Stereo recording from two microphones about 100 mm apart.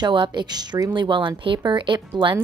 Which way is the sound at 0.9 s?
55° right (ahead or behind).